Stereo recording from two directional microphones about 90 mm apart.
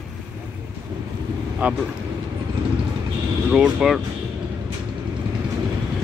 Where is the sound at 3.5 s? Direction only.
10° right (ahead or behind).